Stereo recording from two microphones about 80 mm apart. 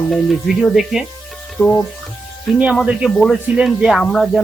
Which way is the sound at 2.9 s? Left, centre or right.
Centre.